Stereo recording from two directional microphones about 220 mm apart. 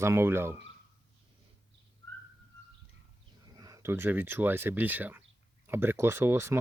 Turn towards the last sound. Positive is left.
turn(degrees=-10)  # may be behind; listen again after turning